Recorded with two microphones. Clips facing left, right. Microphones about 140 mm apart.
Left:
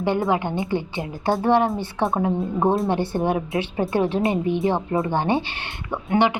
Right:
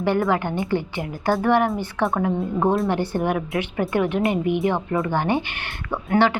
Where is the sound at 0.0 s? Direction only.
20° left (ahead or behind).